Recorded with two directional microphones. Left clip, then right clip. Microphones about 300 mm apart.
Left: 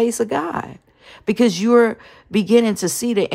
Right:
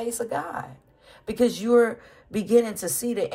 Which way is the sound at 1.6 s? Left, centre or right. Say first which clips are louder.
Left 5 dB; centre.